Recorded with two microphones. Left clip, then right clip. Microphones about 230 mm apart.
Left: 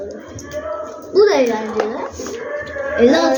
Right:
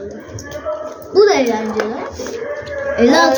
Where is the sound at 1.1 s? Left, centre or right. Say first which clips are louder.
Right 1 dB; centre.